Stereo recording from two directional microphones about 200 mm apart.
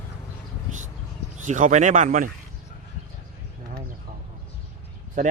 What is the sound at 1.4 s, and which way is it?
Speech, 40° right (ahead or behind).